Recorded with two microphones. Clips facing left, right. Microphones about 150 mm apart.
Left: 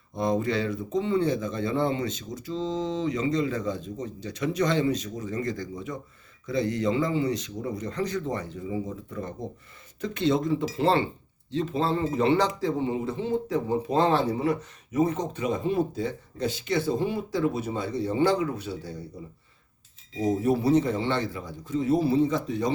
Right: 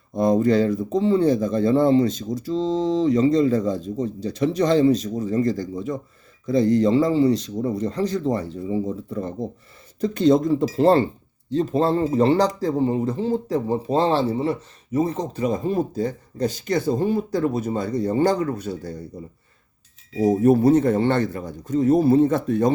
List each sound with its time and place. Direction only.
0.2 s speech: 40° right (ahead or behind)
20.4 s speech: 50° right (ahead or behind)